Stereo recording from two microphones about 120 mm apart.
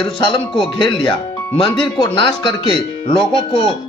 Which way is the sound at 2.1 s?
45° left (ahead or behind).